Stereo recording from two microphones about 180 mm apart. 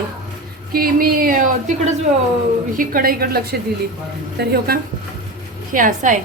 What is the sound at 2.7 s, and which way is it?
A woman's voice, 55° right (ahead or behind).